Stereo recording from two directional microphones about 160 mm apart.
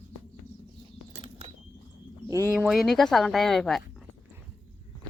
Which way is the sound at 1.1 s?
35° right (ahead or behind).